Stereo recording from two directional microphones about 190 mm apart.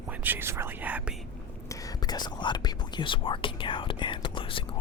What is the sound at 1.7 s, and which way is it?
Speech, 20° left (ahead or behind).